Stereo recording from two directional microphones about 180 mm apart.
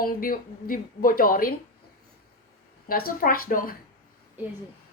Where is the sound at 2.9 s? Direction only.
55° left (ahead or behind).